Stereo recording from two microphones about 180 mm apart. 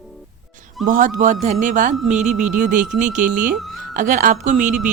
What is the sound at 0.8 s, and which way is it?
Speech, 45° right (ahead or behind).